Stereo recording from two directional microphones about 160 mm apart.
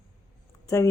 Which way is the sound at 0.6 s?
15° left (ahead or behind).